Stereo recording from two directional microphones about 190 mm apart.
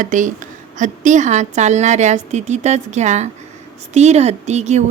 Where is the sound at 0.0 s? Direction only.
40° right (ahead or behind).